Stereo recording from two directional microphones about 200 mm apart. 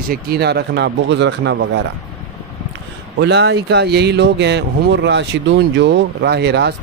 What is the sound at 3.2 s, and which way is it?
Speech, 60° right (ahead or behind).